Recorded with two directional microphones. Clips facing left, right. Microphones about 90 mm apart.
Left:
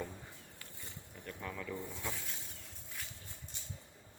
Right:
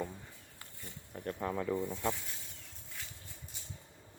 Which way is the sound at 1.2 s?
40° right (ahead or behind).